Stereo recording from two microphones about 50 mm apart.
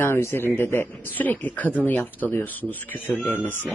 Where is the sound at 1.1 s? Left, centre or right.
Left.